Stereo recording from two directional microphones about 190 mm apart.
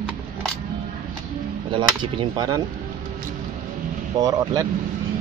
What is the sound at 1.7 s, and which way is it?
Speech, 25° right (ahead or behind).